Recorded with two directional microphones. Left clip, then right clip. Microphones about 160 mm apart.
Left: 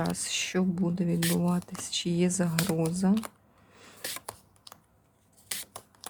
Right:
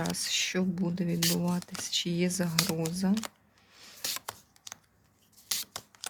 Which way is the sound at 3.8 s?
25° left (ahead or behind).